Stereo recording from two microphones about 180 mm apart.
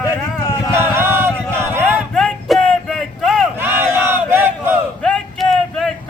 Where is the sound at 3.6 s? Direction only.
10° right (ahead or behind).